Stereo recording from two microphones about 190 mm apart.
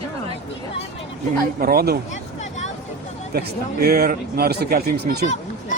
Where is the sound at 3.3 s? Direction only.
55° right (ahead or behind).